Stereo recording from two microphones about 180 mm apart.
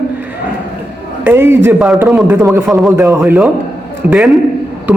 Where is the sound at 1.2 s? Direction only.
15° right (ahead or behind).